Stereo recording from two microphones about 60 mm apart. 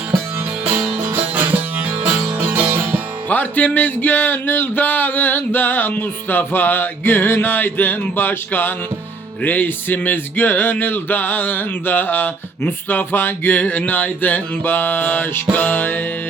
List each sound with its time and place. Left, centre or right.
1.0 s music: right
3.2 s music: left